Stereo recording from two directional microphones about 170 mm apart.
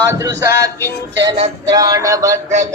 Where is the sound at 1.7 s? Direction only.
20° right (ahead or behind).